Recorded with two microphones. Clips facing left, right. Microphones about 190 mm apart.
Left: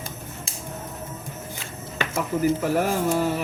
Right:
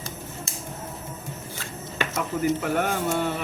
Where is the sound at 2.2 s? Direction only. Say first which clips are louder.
Left 3 dB; 35° left (ahead or behind).